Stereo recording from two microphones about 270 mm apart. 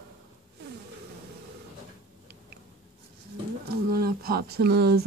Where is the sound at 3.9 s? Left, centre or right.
Right.